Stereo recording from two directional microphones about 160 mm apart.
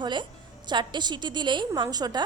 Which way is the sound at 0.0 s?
30° right (ahead or behind).